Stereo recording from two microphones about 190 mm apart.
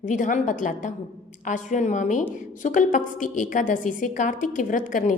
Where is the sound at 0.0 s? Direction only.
40° left (ahead or behind).